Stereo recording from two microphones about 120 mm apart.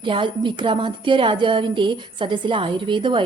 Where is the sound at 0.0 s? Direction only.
45° right (ahead or behind).